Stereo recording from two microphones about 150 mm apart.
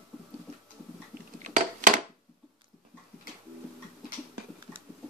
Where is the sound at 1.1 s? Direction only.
60° right (ahead or behind).